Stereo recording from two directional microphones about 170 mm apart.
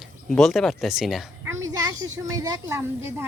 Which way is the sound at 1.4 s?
15° right (ahead or behind).